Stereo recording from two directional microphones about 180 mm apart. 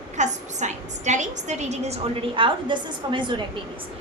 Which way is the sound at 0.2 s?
40° right (ahead or behind).